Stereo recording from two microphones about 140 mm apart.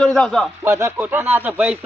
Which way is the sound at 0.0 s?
5° left (ahead or behind).